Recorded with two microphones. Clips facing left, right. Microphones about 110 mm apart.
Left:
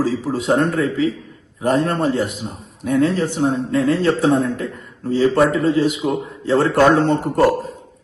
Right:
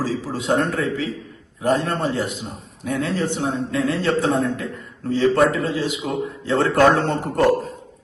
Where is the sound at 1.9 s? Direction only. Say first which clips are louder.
Left 4 dB; centre (ahead or behind).